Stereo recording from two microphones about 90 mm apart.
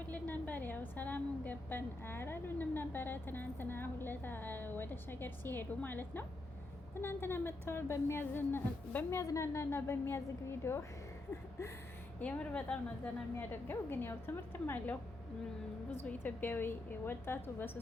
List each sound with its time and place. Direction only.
0.0 s a woman's voice: 20° left (ahead or behind)
9.2 s a woman's voice: 35° left (ahead or behind)
12.2 s a woman's voice: 15° left (ahead or behind)
13.3 s a woman's voice: 25° left (ahead or behind)